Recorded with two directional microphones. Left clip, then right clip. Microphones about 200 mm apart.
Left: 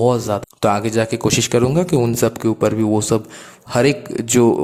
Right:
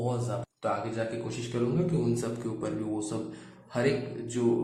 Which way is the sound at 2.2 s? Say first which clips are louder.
Left 17 dB; 45° left (ahead or behind).